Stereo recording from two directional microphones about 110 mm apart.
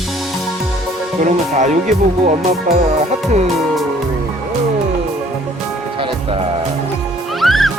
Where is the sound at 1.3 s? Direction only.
90° right.